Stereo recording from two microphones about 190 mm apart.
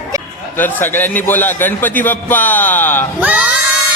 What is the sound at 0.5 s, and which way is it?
A man's voice, 10° left (ahead or behind).